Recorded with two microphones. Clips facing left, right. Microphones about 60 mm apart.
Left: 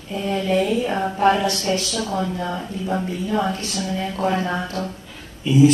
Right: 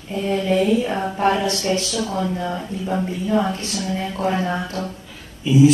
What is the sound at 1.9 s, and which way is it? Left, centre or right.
Speech, left.